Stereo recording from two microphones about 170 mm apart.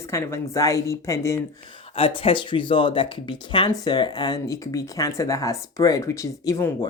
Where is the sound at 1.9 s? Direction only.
35° left (ahead or behind).